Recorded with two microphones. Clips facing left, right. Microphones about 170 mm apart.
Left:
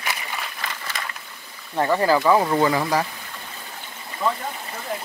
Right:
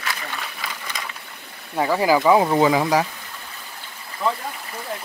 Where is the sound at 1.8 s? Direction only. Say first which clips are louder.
Right 1 dB; 5° right (ahead or behind).